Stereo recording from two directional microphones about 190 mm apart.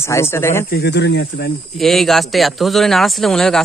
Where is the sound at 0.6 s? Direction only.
60° left (ahead or behind).